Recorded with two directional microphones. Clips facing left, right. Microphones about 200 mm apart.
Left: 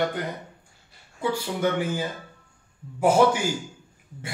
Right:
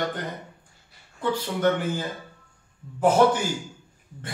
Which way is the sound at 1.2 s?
10° left (ahead or behind).